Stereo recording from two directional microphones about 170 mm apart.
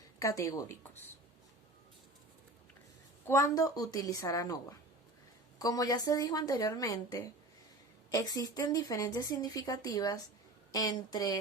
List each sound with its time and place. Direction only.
0.2 s speech: 20° left (ahead or behind)
3.2 s a woman's voice: 15° left (ahead or behind)